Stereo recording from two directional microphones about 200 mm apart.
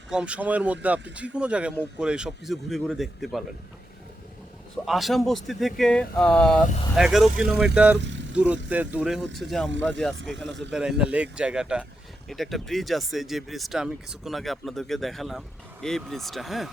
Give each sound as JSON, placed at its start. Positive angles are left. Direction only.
{"t": 0.1, "sound": "speech", "side_deg": -5}
{"t": 4.9, "sound": "speech", "side_deg": 0}
{"t": 7.9, "sound": "vehicle", "side_deg": -60}
{"t": 8.7, "sound": "speech", "side_deg": -5}
{"t": 9.6, "sound": "speech", "side_deg": -65}
{"t": 10.7, "sound": "speech", "side_deg": -5}